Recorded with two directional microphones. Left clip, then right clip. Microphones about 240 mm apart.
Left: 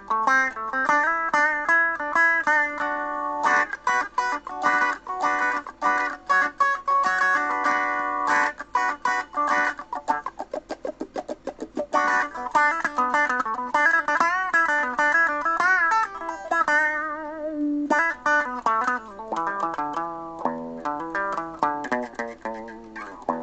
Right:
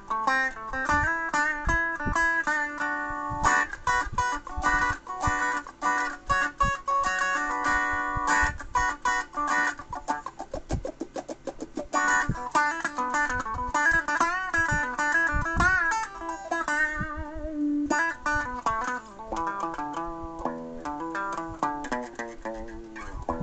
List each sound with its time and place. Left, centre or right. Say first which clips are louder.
0.1 s music: left 5 dB; left
11.7 s music: left 3 dB; left